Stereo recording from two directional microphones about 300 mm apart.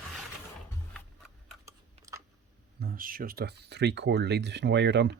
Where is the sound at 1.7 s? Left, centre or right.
Centre.